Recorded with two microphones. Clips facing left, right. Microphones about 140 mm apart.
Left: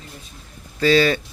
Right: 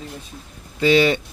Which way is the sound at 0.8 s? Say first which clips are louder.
Right 1 dB; 20° right (ahead or behind).